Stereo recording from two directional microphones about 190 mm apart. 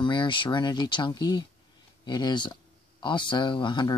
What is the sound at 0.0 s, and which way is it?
Speech, 25° left (ahead or behind).